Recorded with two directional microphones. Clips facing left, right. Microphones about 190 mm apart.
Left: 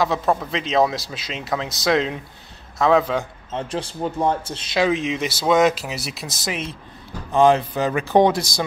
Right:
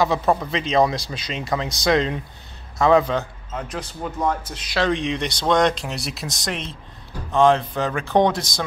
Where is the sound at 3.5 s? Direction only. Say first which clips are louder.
Left 4 dB; 30° left (ahead or behind).